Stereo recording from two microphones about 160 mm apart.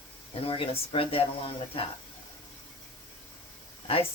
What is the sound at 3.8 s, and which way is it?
Speech, 35° left (ahead or behind).